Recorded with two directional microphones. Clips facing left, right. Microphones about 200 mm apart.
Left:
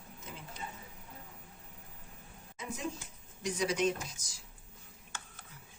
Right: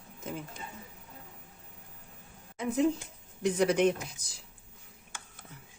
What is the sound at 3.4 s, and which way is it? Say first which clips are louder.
Speech: right 6 dB; 60° right (ahead or behind).